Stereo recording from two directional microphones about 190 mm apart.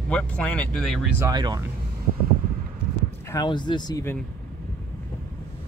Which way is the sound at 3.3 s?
20° left (ahead or behind).